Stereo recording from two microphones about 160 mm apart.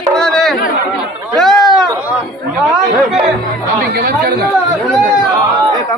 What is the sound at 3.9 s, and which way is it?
Speech, 75° right (ahead or behind).